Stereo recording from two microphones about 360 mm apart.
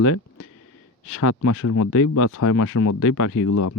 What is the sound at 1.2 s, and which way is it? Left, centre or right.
Speech, left.